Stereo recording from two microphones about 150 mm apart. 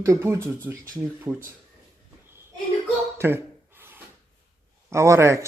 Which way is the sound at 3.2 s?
15° right (ahead or behind).